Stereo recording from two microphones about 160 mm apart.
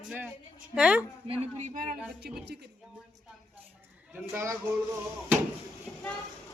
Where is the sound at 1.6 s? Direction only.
60° right (ahead or behind).